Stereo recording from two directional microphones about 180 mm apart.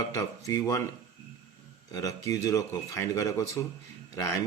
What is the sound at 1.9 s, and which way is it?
Speech, 20° left (ahead or behind).